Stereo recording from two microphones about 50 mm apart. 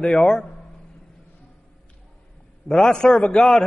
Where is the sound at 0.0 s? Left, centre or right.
Centre.